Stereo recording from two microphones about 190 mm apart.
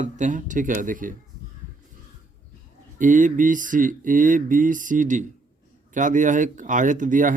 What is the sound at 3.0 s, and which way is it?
Speech, 40° right (ahead or behind).